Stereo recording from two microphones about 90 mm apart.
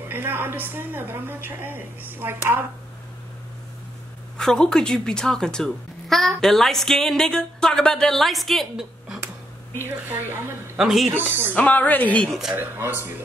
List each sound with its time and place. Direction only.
0.1 s a woman's voice: 25° right (ahead or behind)
4.4 s speech: 5° left (ahead or behind)
9.8 s a woman's voice: 25° right (ahead or behind)
10.8 s speech: 5° right (ahead or behind)
11.1 s a woman's voice: 25° right (ahead or behind)
11.5 s speech: 15° left (ahead or behind)
12.3 s speech: 5° right (ahead or behind)
12.5 s a woman's voice: 25° right (ahead or behind)